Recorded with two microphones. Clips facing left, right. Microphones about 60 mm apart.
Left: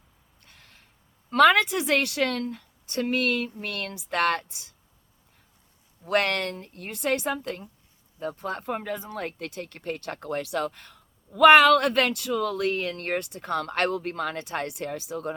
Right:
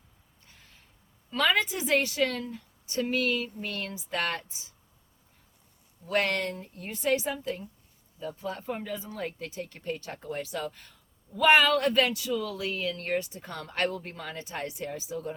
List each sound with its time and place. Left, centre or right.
0.4 s a sound: left
1.3 s speech: left
6.1 s speech: left